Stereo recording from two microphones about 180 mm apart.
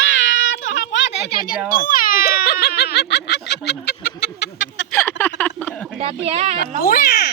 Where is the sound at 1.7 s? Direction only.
50° left (ahead or behind); by 4.8 s 80° left.